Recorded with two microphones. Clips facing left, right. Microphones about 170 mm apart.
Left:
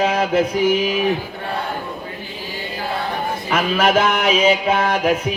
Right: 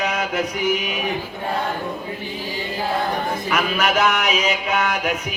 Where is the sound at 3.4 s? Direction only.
30° left (ahead or behind).